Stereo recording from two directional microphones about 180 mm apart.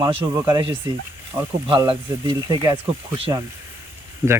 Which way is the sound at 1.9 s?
25° right (ahead or behind).